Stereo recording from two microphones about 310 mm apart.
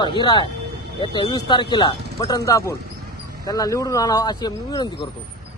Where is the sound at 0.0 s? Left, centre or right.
Centre.